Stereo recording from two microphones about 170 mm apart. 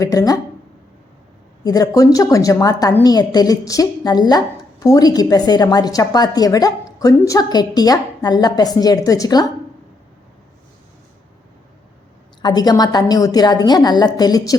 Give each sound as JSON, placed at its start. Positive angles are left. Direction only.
{"t": 0.0, "sound": "a woman's voice", "side_deg": 20}
{"t": 1.6, "sound": "a woman's voice", "side_deg": 20}
{"t": 12.4, "sound": "a woman's voice", "side_deg": 25}